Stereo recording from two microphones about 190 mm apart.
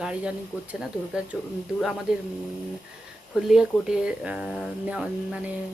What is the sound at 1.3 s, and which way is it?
Speech, centre (ahead or behind).